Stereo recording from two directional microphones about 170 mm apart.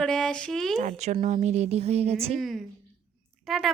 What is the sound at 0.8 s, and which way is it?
Speech, 40° right (ahead or behind).